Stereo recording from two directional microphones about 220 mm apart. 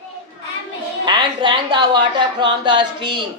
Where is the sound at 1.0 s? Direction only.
20° right (ahead or behind).